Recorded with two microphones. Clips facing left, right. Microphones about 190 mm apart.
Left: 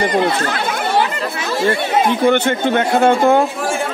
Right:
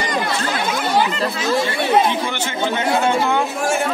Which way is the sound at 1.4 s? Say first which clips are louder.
Left 3 dB; 55° left (ahead or behind).